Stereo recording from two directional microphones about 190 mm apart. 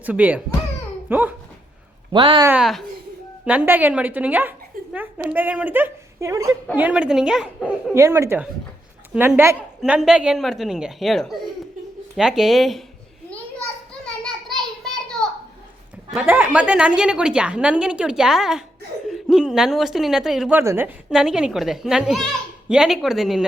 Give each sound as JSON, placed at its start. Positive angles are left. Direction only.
{"t": 0.0, "sound": "speech", "side_deg": -10}
{"t": 2.1, "sound": "speech", "side_deg": -25}
{"t": 2.5, "sound": "a woman's voice", "side_deg": 0}
{"t": 7.9, "sound": "speech", "side_deg": -15}
{"t": 14.0, "sound": "a sound", "side_deg": 5}
{"t": 16.1, "sound": "speech", "side_deg": -10}